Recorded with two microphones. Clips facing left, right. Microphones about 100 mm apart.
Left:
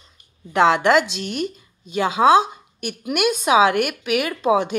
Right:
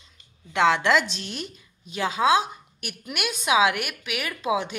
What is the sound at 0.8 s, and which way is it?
Speech, 50° left (ahead or behind).